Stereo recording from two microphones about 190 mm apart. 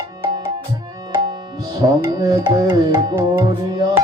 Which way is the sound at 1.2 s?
20° right (ahead or behind).